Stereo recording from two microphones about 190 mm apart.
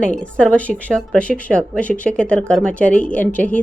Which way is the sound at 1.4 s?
5° left (ahead or behind).